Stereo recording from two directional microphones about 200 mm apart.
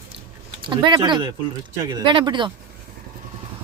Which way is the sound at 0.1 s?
60° right (ahead or behind).